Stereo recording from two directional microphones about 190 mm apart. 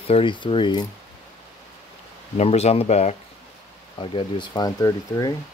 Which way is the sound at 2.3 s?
35° left (ahead or behind).